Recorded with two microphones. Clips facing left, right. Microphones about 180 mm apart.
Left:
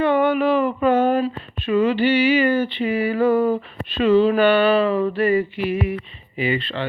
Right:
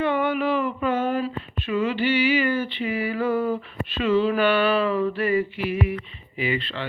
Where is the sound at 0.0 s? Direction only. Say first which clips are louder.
Left 5 dB; 30° left (ahead or behind).